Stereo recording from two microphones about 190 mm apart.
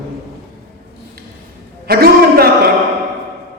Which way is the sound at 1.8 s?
55° right (ahead or behind).